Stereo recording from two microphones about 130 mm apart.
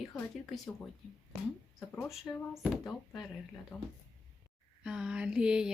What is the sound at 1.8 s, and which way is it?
Speech, 20° left (ahead or behind).